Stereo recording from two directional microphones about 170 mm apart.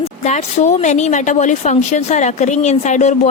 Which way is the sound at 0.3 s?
45° left (ahead or behind).